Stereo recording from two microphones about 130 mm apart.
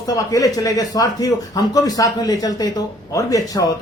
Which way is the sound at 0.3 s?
25° left (ahead or behind).